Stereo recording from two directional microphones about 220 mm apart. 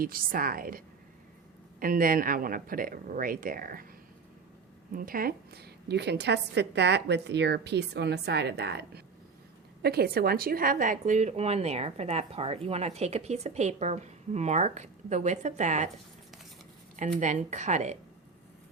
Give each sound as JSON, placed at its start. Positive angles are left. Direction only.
{"t": 0.0, "sound": "speech", "side_deg": -40}
{"t": 1.8, "sound": "speech", "side_deg": -40}
{"t": 4.9, "sound": "a woman's voice", "side_deg": -40}
{"t": 17.2, "sound": "speech", "side_deg": -30}